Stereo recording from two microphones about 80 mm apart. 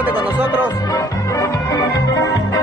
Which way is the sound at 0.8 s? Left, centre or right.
Left.